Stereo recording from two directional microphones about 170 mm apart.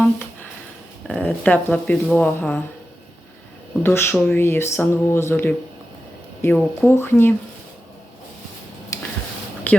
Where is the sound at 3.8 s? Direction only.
15° left (ahead or behind).